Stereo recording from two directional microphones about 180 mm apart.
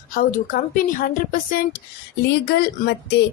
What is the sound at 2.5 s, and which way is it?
Speech, 65° left (ahead or behind).